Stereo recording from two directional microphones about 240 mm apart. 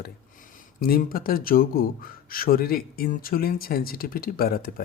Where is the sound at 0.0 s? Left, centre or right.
Left.